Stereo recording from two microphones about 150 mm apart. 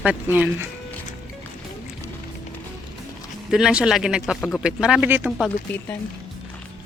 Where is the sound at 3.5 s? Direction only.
5° right (ahead or behind).